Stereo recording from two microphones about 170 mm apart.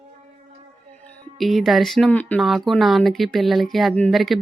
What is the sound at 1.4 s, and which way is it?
Speech, centre (ahead or behind).